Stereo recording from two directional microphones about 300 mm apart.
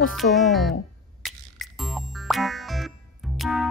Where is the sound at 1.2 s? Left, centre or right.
Centre.